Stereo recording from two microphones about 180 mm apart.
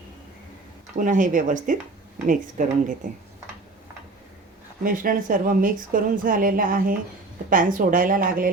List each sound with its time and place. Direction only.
0.9 s a woman's voice: 45° right (ahead or behind)
4.8 s a woman's voice: 50° right (ahead or behind)